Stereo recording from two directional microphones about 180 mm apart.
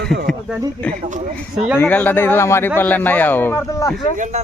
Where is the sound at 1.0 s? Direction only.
45° right (ahead or behind).